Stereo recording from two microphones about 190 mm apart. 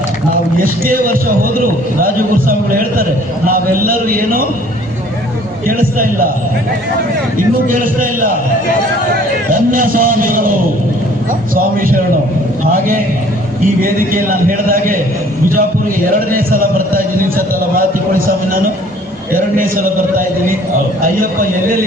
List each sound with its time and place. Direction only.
0.6 s a man's voice: 50° right (ahead or behind)
5.6 s a man's voice: 50° right (ahead or behind)
7.7 s a man's voice: 45° right (ahead or behind)
9.5 s a man's voice: 45° right (ahead or behind)
11.5 s a man's voice: 50° right (ahead or behind)
13.8 s a man's voice: 45° right (ahead or behind)
16.0 s a man's voice: 50° right (ahead or behind)
19.3 s a man's voice: 45° right (ahead or behind)